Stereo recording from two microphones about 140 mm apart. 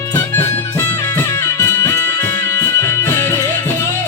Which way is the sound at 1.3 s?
25° left (ahead or behind).